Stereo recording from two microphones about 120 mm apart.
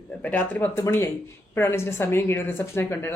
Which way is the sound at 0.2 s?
15° left (ahead or behind).